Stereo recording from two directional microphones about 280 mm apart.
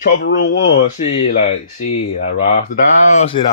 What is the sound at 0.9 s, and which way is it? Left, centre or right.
Speech, left.